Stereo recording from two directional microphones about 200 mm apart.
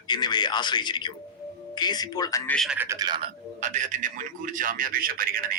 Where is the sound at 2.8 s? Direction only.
15° right (ahead or behind).